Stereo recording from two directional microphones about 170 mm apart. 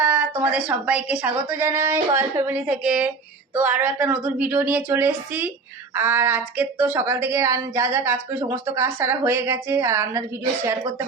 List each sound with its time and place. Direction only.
0.0 s speech: 10° right (ahead or behind)